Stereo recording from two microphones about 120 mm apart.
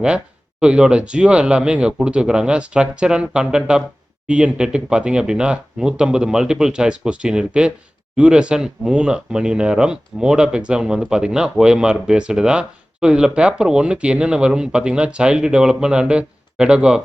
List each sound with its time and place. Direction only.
0.6 s speech: 10° right (ahead or behind)